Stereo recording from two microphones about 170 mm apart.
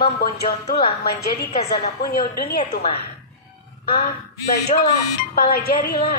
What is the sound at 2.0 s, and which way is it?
Speech, 65° left (ahead or behind).